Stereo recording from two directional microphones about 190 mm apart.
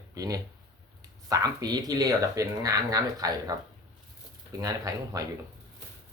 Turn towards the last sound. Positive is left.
turn(degrees=-20)  # may be behind; listen again after turning